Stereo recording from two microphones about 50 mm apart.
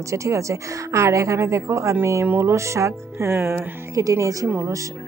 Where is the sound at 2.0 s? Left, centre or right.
Right.